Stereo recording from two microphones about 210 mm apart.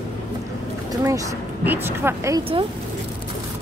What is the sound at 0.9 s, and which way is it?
Speech, 15° right (ahead or behind).